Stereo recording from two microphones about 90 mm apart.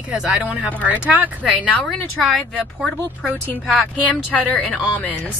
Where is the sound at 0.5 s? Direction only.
20° right (ahead or behind).